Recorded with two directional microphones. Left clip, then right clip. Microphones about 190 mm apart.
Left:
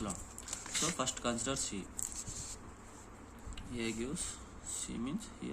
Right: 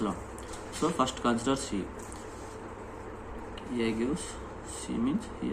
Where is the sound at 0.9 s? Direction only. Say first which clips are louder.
Right 8 dB; 40° left (ahead or behind).